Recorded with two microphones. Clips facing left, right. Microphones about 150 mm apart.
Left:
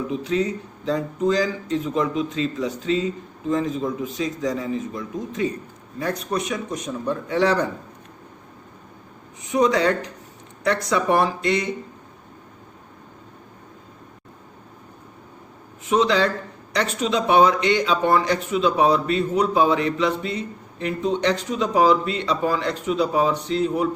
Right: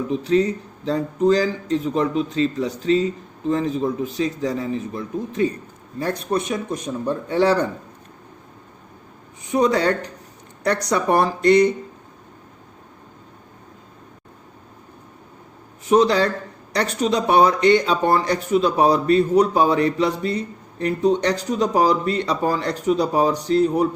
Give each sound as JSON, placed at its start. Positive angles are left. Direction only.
{"t": 0.1, "sound": "speech", "side_deg": -35}
{"t": 4.1, "sound": "speech", "side_deg": -30}
{"t": 9.5, "sound": "speech", "side_deg": -35}
{"t": 15.9, "sound": "speech", "side_deg": -40}